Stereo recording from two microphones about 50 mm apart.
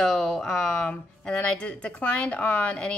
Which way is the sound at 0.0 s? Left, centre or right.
Centre.